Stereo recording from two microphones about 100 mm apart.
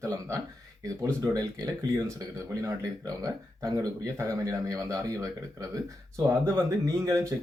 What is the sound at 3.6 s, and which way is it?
Speech, 35° right (ahead or behind).